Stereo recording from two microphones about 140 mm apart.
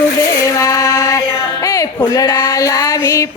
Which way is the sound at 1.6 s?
20° left (ahead or behind).